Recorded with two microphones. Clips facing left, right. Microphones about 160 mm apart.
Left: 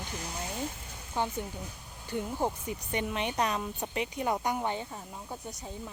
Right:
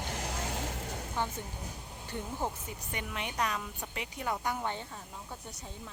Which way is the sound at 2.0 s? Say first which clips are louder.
Left 5 dB; 15° left (ahead or behind).